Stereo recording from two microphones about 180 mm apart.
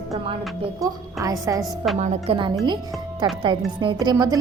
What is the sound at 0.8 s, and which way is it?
Speech, 20° right (ahead or behind).